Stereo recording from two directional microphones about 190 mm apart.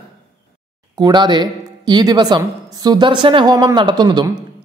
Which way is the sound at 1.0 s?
20° right (ahead or behind).